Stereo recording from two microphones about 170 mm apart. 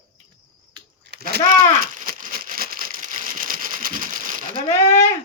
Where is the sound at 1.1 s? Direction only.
70° right (ahead or behind).